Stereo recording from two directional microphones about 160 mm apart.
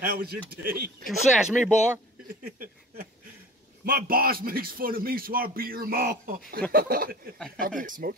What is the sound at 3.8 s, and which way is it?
Speech, 70° right (ahead or behind).